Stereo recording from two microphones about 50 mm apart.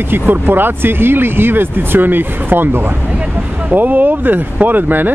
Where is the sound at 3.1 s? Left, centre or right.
Right.